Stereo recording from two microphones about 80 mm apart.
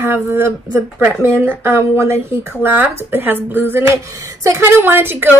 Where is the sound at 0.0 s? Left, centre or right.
Right.